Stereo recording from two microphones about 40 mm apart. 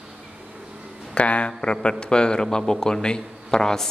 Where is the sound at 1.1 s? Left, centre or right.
Left.